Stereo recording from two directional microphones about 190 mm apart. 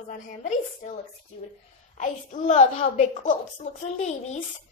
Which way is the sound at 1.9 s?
35° left (ahead or behind).